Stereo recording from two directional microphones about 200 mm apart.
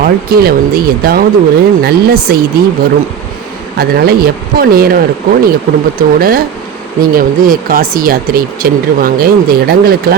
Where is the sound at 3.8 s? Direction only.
50° right (ahead or behind).